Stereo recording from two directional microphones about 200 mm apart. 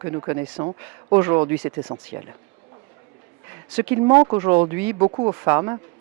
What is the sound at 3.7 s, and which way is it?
Speech, 10° right (ahead or behind).